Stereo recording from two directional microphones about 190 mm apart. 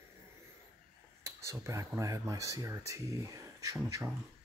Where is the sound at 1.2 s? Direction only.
15° right (ahead or behind).